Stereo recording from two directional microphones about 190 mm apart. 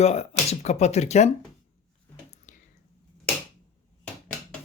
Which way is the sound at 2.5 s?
40° left (ahead or behind).